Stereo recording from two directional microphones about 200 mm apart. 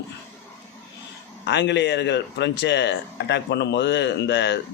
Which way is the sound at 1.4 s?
60° left (ahead or behind).